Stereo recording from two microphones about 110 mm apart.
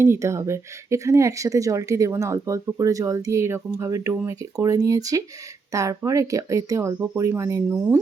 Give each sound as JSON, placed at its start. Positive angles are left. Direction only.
{"t": 0.0, "sound": "speech", "side_deg": -25}